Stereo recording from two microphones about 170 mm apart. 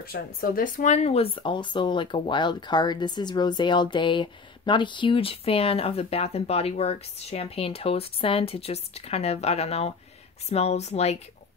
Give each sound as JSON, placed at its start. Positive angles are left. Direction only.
{"t": 0.0, "sound": "speech", "side_deg": 60}